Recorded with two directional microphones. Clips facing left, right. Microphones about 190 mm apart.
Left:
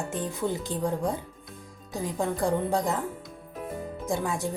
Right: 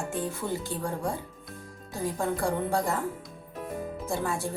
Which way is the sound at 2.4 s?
20° left (ahead or behind).